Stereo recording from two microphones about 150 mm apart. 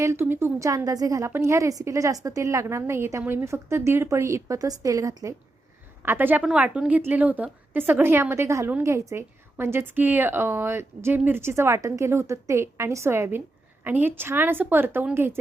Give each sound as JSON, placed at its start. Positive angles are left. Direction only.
{"t": 0.0, "sound": "a woman's voice", "side_deg": -15}